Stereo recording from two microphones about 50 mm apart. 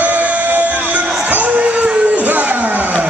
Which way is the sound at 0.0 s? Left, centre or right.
Right.